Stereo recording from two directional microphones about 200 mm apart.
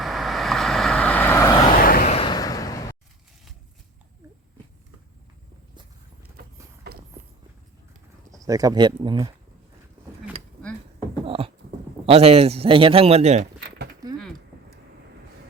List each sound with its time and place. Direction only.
0.0 s vehicle: centre (ahead or behind)
1.8 s vehicle: 45° left (ahead or behind)
2.1 s vehicle: 20° left (ahead or behind)
8.3 s speech: 15° right (ahead or behind)
10.6 s a sound: 5° left (ahead or behind)
11.3 s a sound: 25° right (ahead or behind)
12.0 s speech: 30° right (ahead or behind)